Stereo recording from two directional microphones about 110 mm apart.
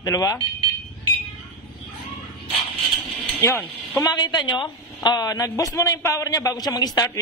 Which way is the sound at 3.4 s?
20° left (ahead or behind).